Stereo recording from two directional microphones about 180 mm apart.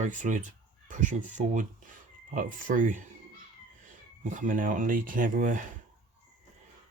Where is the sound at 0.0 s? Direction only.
45° right (ahead or behind).